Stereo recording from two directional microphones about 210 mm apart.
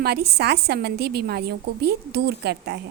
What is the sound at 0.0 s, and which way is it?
A woman's voice, 50° right (ahead or behind).